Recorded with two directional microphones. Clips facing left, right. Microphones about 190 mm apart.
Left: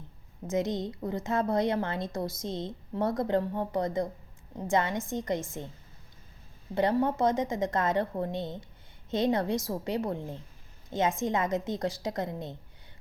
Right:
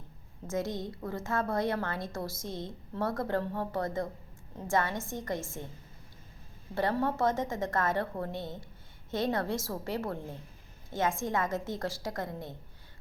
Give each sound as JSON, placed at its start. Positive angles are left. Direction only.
{"t": 0.4, "sound": "a woman's voice", "side_deg": 20}
{"t": 6.7, "sound": "a woman's voice", "side_deg": 20}